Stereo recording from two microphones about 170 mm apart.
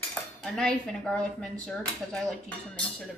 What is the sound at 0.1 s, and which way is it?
Cutlery, 5° left (ahead or behind).